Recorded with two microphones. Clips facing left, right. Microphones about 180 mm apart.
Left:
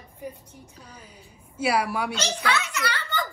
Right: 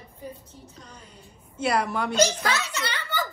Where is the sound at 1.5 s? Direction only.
10° left (ahead or behind).